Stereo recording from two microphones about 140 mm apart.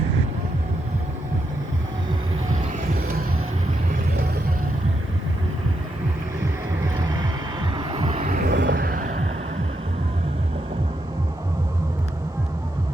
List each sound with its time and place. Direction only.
6.4 s vehicle: 25° right (ahead or behind)
8.1 s vehicle: 55° right (ahead or behind)
8.4 s vehicle: 85° right